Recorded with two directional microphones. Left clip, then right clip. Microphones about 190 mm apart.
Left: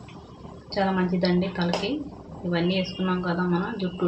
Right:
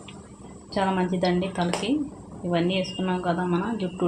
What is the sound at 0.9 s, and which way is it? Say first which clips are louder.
A woman's voice: even; 30° right (ahead or behind).